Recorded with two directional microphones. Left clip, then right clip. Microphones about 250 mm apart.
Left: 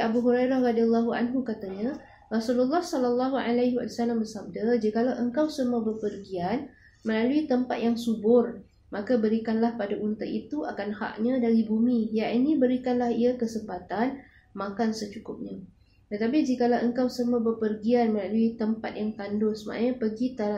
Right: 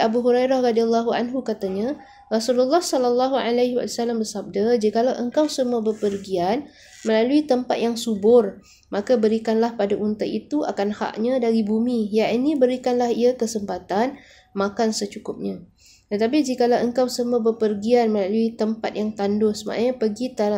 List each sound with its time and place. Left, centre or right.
0.0 s speech: right
16.1 s speech: right